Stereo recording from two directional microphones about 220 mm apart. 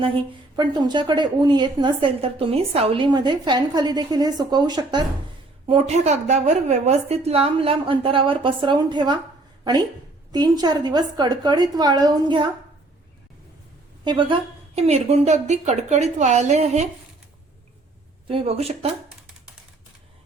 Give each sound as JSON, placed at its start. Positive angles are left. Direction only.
{"t": 0.5, "sound": "a woman's voice", "side_deg": -20}
{"t": 5.6, "sound": "a woman's voice", "side_deg": -30}
{"t": 10.3, "sound": "a woman's voice", "side_deg": -20}
{"t": 14.0, "sound": "a woman's voice", "side_deg": -20}
{"t": 18.3, "sound": "a woman's voice", "side_deg": -25}